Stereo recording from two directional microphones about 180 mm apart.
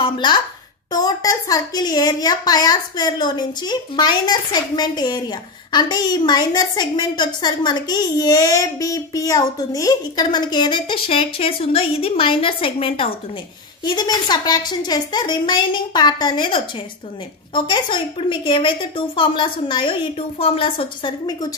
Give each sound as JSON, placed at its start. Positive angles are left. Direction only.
{"t": 0.0, "sound": "a woman's voice", "side_deg": 25}